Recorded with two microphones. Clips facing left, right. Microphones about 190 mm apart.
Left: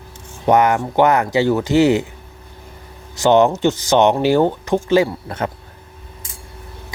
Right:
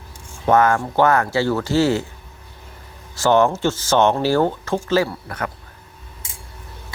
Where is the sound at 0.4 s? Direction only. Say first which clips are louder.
Left 2 dB; 20° left (ahead or behind).